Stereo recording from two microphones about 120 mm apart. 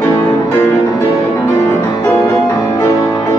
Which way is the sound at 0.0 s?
25° left (ahead or behind).